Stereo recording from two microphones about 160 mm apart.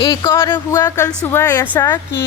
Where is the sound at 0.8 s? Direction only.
15° left (ahead or behind).